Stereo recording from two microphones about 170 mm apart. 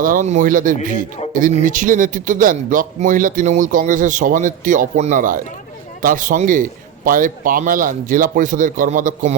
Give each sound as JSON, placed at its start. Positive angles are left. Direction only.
{"t": 0.0, "sound": "a man's voice", "side_deg": -50}